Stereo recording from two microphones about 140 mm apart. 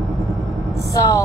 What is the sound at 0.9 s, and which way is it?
Speech, 25° left (ahead or behind).